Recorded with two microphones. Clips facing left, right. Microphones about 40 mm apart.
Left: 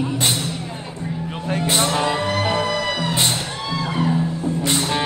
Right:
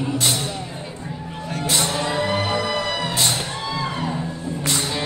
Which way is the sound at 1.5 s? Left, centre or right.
Left.